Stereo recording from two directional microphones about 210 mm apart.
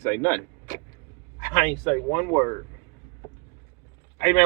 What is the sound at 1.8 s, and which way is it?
Speech, 25° left (ahead or behind).